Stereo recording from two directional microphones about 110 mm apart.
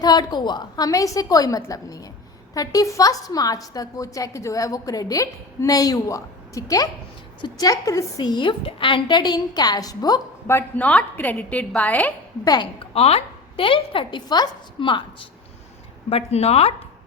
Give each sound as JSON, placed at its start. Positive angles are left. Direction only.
{"t": 0.0, "sound": "a woman's voice", "side_deg": 40}
{"t": 8.2, "sound": "a woman's voice", "side_deg": 45}
{"t": 10.4, "sound": "a woman's voice", "side_deg": 20}
{"t": 12.8, "sound": "a woman's voice", "side_deg": 65}
{"t": 16.0, "sound": "speech", "side_deg": 65}